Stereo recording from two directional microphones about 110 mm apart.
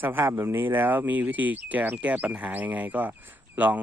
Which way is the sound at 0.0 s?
20° right (ahead or behind).